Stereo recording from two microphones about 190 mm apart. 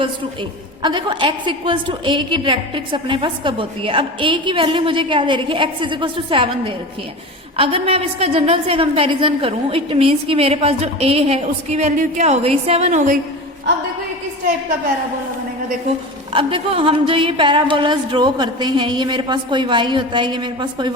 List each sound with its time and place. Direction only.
0.8 s a woman's voice: 25° right (ahead or behind)
16.3 s a woman's voice: 25° right (ahead or behind)